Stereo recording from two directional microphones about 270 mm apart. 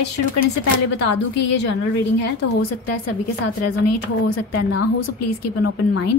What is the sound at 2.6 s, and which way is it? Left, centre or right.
A woman's voice, left.